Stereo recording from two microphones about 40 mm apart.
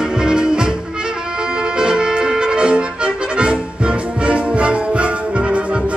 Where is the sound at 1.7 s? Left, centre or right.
Right.